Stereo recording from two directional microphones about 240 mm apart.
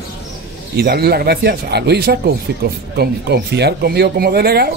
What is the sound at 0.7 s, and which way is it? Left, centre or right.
Speech, right.